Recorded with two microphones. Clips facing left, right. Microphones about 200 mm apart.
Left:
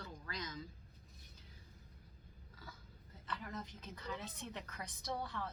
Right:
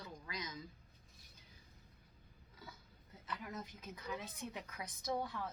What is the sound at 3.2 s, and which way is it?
A woman's voice, 10° right (ahead or behind).